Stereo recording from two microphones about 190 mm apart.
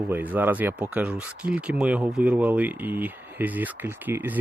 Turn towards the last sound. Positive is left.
turn(degrees=-10)  # may be behind; listen again after turning